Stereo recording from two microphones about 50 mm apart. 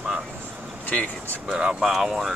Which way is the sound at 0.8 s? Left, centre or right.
Left.